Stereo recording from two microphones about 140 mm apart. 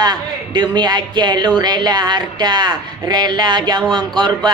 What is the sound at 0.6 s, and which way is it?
A woman's voice, 30° right (ahead or behind).